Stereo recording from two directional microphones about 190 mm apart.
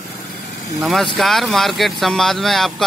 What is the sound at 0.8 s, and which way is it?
A man's voice, centre (ahead or behind).